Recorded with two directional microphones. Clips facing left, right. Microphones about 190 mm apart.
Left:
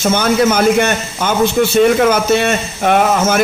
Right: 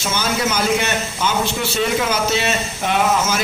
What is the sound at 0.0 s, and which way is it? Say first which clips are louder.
A man's voice: left 9 dB; 55° left (ahead or behind).